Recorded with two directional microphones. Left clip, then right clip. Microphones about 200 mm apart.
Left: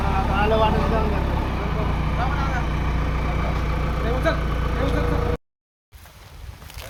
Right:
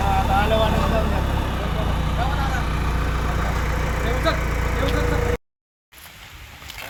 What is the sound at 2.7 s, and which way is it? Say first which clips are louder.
Vehicle: right 2 dB; 20° left (ahead or behind).